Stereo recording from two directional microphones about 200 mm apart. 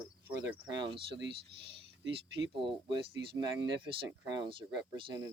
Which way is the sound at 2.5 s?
25° right (ahead or behind).